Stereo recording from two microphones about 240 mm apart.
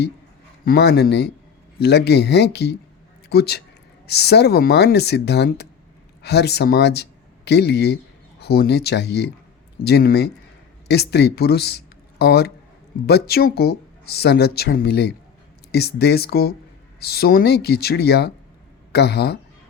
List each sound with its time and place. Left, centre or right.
0.6 s speech: left